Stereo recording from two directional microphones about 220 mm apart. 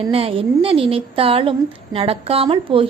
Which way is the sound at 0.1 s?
25° right (ahead or behind).